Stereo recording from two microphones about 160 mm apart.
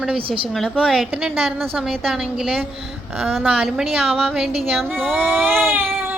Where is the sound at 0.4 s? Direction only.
Centre (ahead or behind).